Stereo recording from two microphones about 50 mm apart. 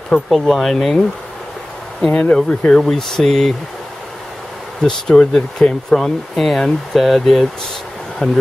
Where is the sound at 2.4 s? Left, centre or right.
Centre.